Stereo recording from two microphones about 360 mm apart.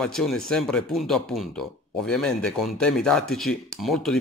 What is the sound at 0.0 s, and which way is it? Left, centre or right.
Speech, centre.